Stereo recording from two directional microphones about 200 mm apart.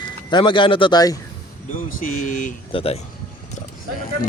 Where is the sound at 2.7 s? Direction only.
30° left (ahead or behind).